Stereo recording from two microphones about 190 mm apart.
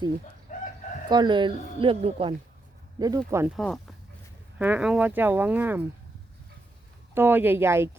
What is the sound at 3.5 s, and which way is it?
Speech, centre (ahead or behind).